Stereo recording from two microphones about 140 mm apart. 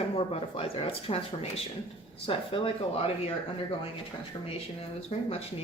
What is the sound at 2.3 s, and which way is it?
Speech, 40° left (ahead or behind).